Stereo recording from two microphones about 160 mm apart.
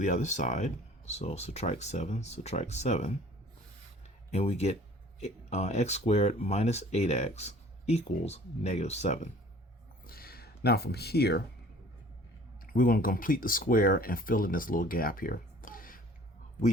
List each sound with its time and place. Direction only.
0.0 s speech: 50° left (ahead or behind)
4.3 s speech: 40° left (ahead or behind)
10.1 s speech: 70° left (ahead or behind); by 11.4 s 90° left
12.6 s speech: 60° left (ahead or behind)